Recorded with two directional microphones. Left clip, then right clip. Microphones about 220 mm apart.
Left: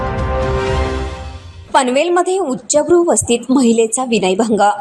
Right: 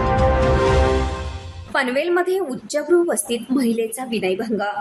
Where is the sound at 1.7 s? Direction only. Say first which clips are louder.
Left 7 dB; 25° left (ahead or behind).